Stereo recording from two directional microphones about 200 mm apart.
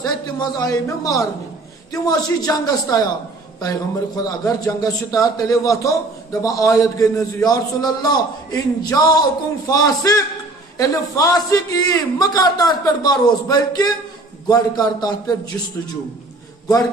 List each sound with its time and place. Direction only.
0.0 s a man's voice: 20° left (ahead or behind)